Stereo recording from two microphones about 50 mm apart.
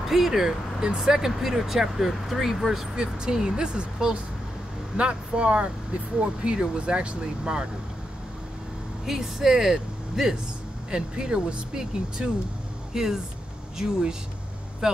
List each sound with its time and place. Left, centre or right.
0.1 s speech: centre
9.0 s speech: centre